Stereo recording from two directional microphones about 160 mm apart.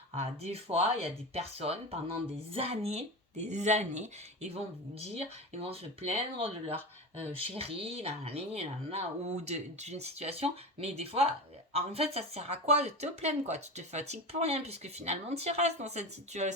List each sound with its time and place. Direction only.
0.2 s speech: 40° right (ahead or behind)